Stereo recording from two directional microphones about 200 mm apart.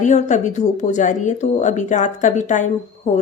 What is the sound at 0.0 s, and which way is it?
Speech, 35° left (ahead or behind).